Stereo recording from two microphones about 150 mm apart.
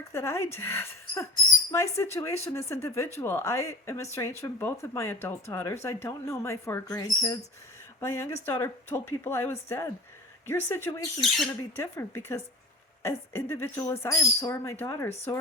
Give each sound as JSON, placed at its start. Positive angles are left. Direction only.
{"t": 0.1, "sound": "speech", "side_deg": 15}
{"t": 11.2, "sound": "speech", "side_deg": 0}
{"t": 11.8, "sound": "speech", "side_deg": 15}